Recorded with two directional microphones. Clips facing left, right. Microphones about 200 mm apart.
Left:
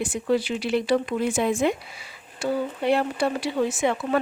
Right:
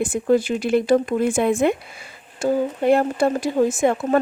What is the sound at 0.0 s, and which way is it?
Speech, 50° right (ahead or behind).